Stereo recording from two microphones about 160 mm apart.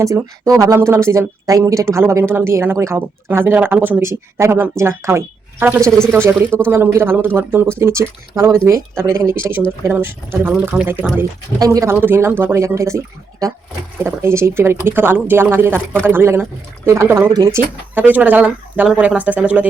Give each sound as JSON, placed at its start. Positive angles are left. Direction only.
{"t": 0.0, "sound": "speech", "side_deg": -20}